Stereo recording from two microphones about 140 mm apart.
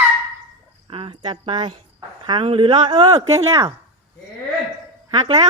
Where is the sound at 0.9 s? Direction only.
40° right (ahead or behind).